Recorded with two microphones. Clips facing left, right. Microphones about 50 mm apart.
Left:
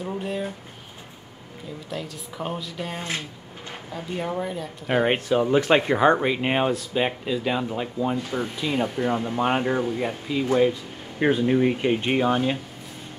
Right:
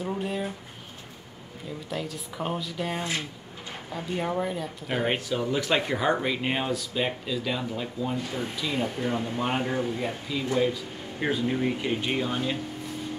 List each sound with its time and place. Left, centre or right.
0.0 s a sound: centre
1.9 s a woman's voice: centre
4.8 s speech: centre